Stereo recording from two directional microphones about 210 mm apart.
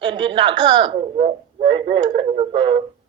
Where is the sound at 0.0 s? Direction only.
20° right (ahead or behind).